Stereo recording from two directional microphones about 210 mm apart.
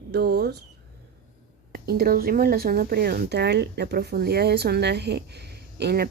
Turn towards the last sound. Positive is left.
turn(degrees=-50)  # may be behind; listen again after turning